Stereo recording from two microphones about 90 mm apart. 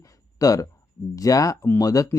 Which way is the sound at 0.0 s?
40° left (ahead or behind).